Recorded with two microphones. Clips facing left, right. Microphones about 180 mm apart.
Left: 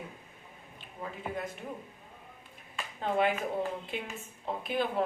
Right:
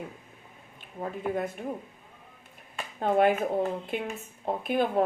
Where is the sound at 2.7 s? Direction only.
50° right (ahead or behind).